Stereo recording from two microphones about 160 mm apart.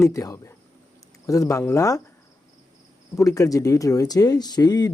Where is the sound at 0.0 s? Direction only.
20° left (ahead or behind).